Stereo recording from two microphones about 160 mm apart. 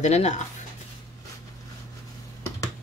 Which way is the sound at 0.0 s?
45° left (ahead or behind).